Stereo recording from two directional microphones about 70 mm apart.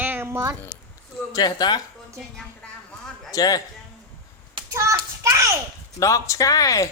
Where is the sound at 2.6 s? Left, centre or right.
Centre.